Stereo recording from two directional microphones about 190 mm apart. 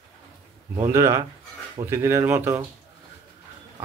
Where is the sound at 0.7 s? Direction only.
15° right (ahead or behind).